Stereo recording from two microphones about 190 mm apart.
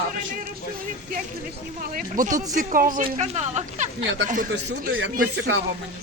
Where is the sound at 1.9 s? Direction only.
45° right (ahead or behind).